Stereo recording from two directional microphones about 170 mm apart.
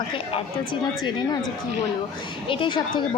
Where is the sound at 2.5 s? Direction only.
30° left (ahead or behind).